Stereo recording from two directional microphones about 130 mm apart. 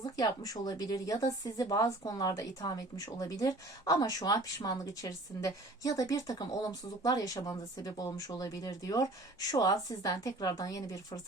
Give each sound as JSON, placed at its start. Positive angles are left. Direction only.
{"t": 0.0, "sound": "speech", "side_deg": 30}